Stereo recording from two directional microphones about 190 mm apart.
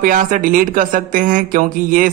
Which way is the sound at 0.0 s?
45° right (ahead or behind).